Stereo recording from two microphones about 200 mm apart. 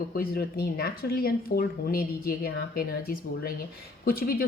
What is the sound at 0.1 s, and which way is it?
Speech, 50° left (ahead or behind).